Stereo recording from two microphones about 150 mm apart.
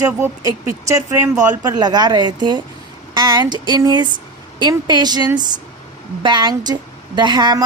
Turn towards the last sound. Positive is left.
turn(degrees=-30)  # may be behind; listen again after turning